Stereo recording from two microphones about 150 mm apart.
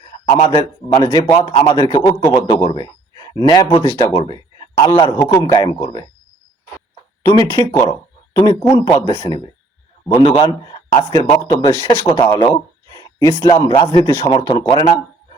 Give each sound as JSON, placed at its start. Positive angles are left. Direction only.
{"t": 0.3, "sound": "a man's voice", "side_deg": 35}
{"t": 4.2, "sound": "a sound", "side_deg": 35}
{"t": 4.9, "sound": "a man's voice", "side_deg": 30}
{"t": 7.2, "sound": "speech", "side_deg": 25}